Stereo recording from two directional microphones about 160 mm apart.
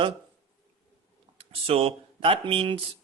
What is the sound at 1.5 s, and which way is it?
Speech, 40° right (ahead or behind).